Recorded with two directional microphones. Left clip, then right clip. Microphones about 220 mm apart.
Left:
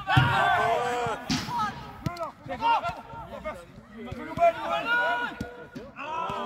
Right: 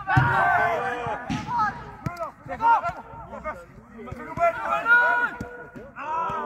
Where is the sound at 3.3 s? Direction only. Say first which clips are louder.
Right 3 dB; centre (ahead or behind).